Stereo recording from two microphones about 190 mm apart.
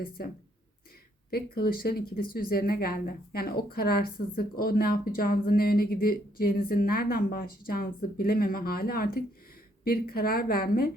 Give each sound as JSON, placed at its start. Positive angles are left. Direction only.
{"t": 0.2, "sound": "speech", "side_deg": 55}